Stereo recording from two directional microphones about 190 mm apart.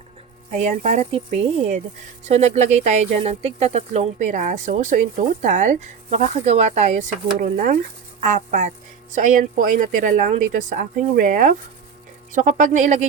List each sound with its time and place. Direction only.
0.5 s a woman's voice: 35° right (ahead or behind)